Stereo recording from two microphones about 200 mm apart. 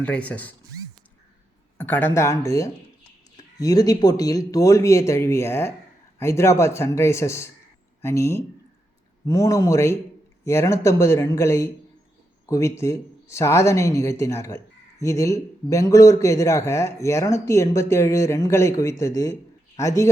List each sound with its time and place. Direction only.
0.0 s speech: 5° left (ahead or behind)
1.8 s speech: 10° left (ahead or behind)